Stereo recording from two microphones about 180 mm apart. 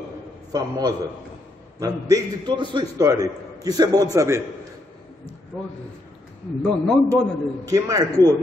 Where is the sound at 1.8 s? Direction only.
20° right (ahead or behind).